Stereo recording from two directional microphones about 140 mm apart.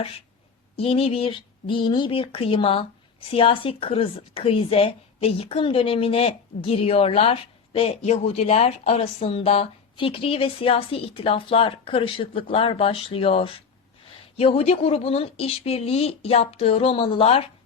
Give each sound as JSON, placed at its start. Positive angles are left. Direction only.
{"t": 0.8, "sound": "a woman's voice", "side_deg": 45}